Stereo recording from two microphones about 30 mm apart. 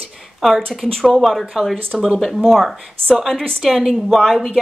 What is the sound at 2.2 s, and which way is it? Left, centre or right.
Speech, centre.